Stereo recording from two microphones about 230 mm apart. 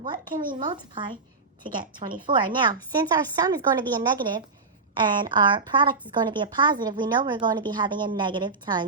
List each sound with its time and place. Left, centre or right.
0.0 s a woman's voice: centre
4.9 s a woman's voice: centre